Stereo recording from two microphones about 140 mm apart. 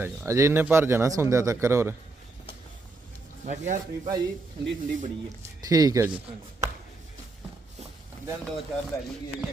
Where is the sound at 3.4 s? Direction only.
60° right (ahead or behind).